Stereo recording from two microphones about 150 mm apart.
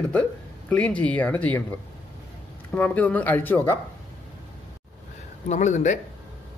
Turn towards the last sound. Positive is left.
turn(degrees=50)  # may be behind; listen again after turning